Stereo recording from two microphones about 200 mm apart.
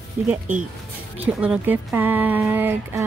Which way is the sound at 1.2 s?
5° right (ahead or behind).